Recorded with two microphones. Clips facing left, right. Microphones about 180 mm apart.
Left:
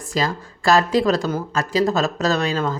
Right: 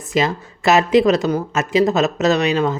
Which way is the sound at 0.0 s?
20° right (ahead or behind).